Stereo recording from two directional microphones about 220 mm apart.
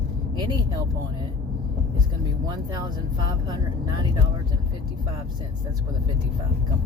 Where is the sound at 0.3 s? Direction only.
20° right (ahead or behind).